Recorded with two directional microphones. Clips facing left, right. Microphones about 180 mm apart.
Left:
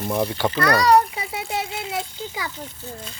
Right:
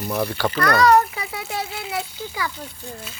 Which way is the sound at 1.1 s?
25° left (ahead or behind).